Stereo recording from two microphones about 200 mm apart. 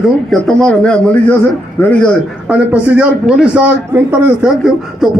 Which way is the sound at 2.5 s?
5° right (ahead or behind).